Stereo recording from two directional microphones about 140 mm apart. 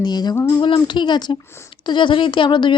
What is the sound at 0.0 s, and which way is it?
Speech, 30° left (ahead or behind).